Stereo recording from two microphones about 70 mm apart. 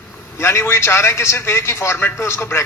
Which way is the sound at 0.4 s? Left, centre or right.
Left.